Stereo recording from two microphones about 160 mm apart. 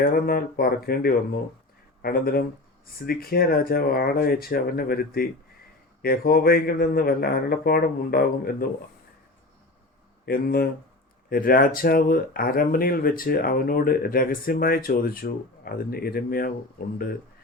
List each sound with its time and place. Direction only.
0.0 s speech: 65° left (ahead or behind)
10.2 s speech: 75° left (ahead or behind)
11.3 s speech: 65° left (ahead or behind)